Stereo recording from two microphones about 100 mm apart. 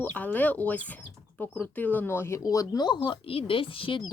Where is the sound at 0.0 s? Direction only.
15° left (ahead or behind).